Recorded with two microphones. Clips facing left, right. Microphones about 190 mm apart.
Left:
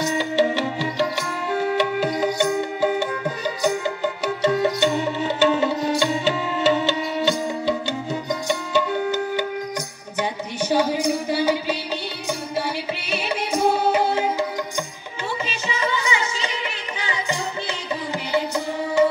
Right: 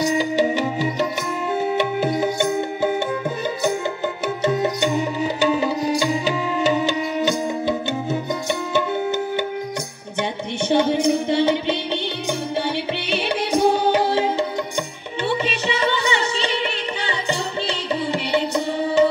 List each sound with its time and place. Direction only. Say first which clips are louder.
0.0 s music: right 1 dB; 15° right (ahead or behind)
4.5 s music: left 1 dB; 20° right (ahead or behind)
10.6 s music: right 3 dB; 25° right (ahead or behind)
13.3 s music: right 3 dB; 30° right (ahead or behind)
15.6 s music: right 3 dB; 30° right (ahead or behind)